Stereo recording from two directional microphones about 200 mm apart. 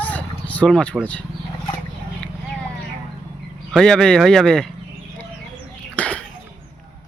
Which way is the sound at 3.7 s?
5° left (ahead or behind).